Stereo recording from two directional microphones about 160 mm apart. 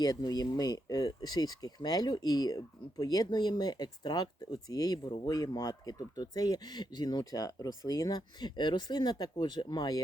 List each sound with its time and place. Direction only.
0.0 s speech: 25° left (ahead or behind)